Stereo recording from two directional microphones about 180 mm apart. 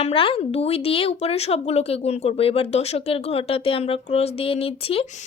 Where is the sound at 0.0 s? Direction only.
30° left (ahead or behind).